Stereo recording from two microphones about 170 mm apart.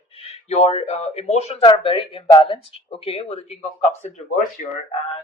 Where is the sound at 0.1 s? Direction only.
35° left (ahead or behind).